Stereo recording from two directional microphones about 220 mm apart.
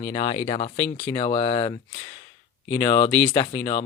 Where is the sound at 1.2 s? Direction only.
25° left (ahead or behind).